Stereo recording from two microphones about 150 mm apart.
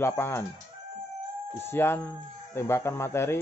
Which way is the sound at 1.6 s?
15° left (ahead or behind).